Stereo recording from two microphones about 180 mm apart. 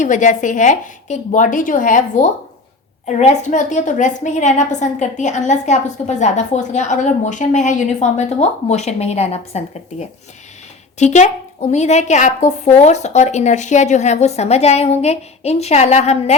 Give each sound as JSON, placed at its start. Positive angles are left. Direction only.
{"t": 0.0, "sound": "a woman's voice", "side_deg": 45}